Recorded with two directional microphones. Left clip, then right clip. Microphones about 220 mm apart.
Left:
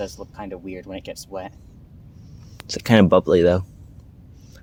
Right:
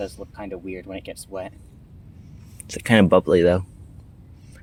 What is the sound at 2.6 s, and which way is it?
Speech, 10° left (ahead or behind).